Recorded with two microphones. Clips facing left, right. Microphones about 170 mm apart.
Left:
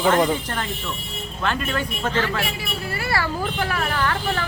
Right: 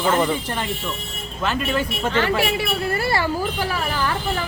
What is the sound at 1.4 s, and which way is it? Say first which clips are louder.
Speech: right 2 dB; 5° right (ahead or behind).